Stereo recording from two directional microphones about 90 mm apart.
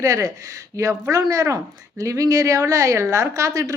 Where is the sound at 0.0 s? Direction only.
35° right (ahead or behind).